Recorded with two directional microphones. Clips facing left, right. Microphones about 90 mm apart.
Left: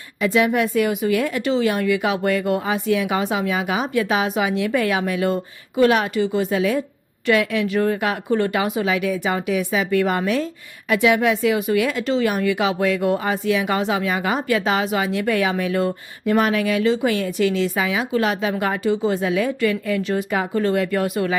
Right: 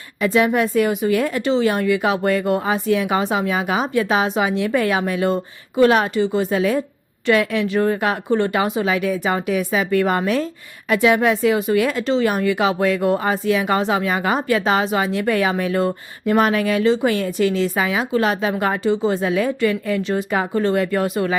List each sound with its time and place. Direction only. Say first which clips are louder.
0.2 s speech: right 1 dB; 35° right (ahead or behind)